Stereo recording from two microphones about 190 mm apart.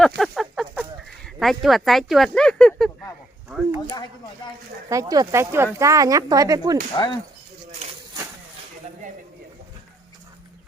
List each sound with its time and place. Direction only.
0.2 s a sound: centre (ahead or behind)
4.9 s speech: 20° right (ahead or behind)
6.9 s speech: 25° left (ahead or behind)